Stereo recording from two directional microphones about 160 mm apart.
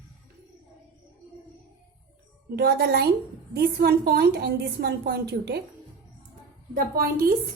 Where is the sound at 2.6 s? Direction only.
80° right.